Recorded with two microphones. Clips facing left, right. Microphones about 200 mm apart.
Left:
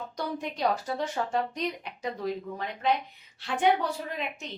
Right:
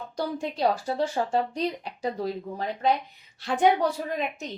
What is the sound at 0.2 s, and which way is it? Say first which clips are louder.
Speech: right 4 dB; 30° right (ahead or behind).